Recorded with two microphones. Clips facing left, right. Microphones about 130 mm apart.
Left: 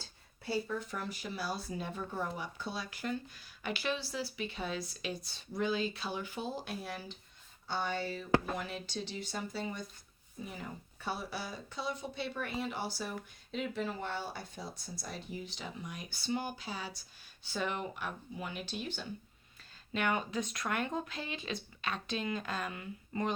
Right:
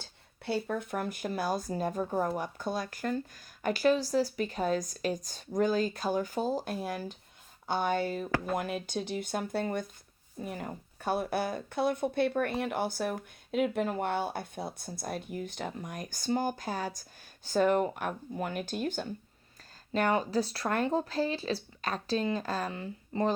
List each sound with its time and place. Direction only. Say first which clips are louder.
0.4 s speech: right 4 dB; 60° right (ahead or behind)
19.9 s speech: right 6 dB; 35° right (ahead or behind)